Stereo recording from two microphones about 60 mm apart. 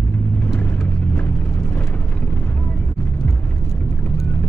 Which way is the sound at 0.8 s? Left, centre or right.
Left.